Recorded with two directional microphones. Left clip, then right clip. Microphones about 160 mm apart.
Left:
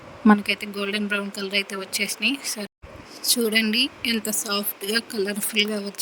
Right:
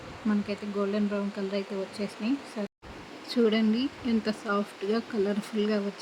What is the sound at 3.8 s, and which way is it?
Speech, 90° left.